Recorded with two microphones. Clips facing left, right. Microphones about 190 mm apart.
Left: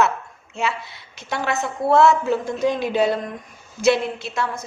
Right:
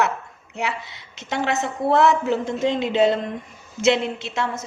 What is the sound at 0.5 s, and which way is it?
A woman's voice, 20° right (ahead or behind).